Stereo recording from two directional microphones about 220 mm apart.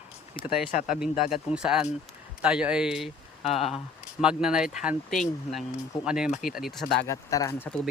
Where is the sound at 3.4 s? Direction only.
25° left (ahead or behind).